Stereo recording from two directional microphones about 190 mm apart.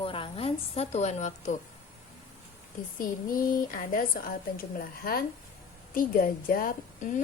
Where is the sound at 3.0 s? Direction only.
45° left (ahead or behind).